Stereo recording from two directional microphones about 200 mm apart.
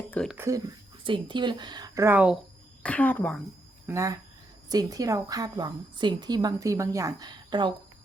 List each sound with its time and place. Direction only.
0.1 s speech: 5° left (ahead or behind)
0.3 s a woman's voice: 15° right (ahead or behind)
2.8 s a woman's voice: 5° left (ahead or behind)
3.8 s a woman's voice: 15° right (ahead or behind)